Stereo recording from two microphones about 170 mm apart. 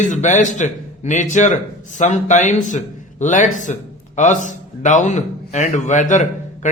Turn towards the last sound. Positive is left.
turn(degrees=45)  # may be behind; listen again after turning